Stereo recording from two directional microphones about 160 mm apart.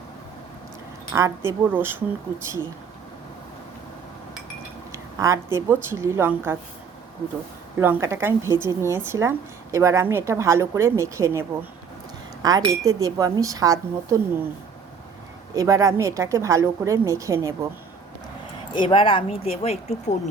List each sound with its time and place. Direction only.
1.1 s speech: 15° right (ahead or behind)
4.9 s speech: 20° right (ahead or behind)
7.8 s a woman's voice: 15° right (ahead or behind)
15.5 s a woman's voice: 20° right (ahead or behind)
18.7 s speech: 30° left (ahead or behind)